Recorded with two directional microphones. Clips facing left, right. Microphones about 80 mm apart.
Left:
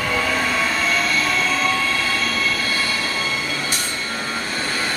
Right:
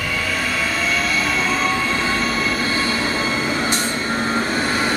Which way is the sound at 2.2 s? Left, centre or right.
Centre.